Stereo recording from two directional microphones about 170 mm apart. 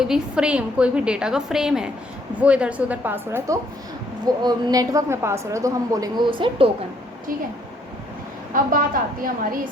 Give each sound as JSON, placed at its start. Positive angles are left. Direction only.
{"t": 0.0, "sound": "a woman's voice", "side_deg": -5}
{"t": 8.5, "sound": "a woman's voice", "side_deg": -55}